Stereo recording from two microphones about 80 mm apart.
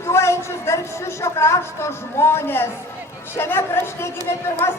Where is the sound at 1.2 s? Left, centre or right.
Left.